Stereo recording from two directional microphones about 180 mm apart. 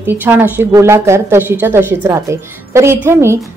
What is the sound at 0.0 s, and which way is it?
A woman's voice, 10° right (ahead or behind).